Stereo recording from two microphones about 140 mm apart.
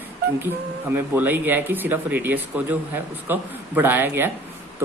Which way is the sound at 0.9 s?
15° right (ahead or behind).